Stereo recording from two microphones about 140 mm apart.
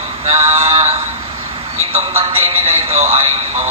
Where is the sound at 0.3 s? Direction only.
50° right (ahead or behind).